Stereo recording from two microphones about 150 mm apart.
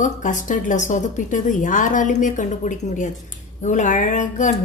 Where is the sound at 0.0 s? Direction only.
60° left (ahead or behind).